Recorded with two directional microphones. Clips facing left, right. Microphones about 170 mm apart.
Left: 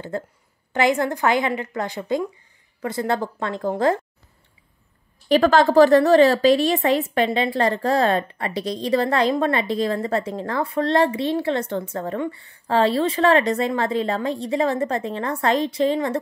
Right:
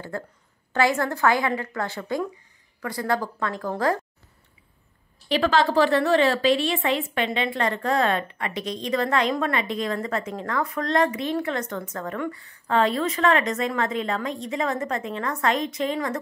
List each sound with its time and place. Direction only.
0.1 s a woman's voice: 20° left (ahead or behind)
5.3 s a woman's voice: 45° left (ahead or behind); by 16.2 s 30° left (ahead or behind)